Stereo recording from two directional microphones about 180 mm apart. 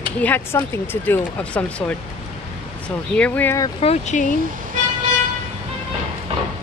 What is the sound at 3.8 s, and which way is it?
Speech, 35° left (ahead or behind).